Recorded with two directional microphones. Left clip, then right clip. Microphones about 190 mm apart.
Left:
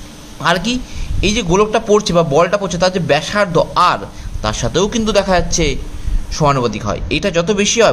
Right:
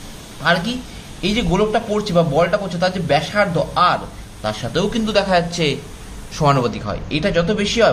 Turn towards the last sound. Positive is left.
turn(degrees=40)  # may be behind; listen again after turning